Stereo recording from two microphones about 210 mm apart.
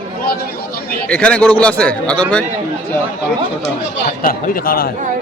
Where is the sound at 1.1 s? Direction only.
5° left (ahead or behind).